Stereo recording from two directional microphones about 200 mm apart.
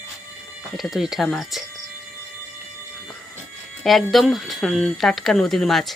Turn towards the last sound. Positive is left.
turn(degrees=0)  # may be behind; listen again after turning